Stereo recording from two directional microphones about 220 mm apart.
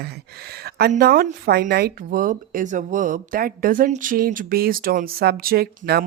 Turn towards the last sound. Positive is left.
turn(degrees=-45)  # may be behind; listen again after turning